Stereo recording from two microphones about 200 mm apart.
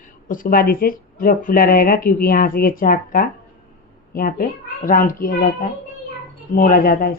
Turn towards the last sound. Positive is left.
turn(degrees=45)  # may be behind; listen again after turning